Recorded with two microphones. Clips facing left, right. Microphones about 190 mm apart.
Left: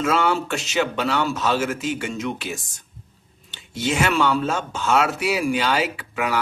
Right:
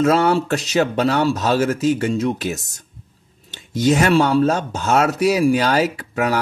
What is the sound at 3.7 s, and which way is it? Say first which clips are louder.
Speech: right 7 dB; 40° right (ahead or behind).